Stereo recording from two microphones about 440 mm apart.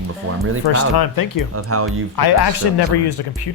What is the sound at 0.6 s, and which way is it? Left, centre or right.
Speech, left.